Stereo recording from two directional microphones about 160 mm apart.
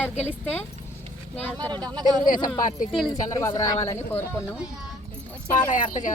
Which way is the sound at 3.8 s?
15° left (ahead or behind).